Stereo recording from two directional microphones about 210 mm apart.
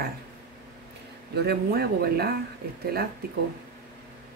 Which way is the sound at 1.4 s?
50° right (ahead or behind).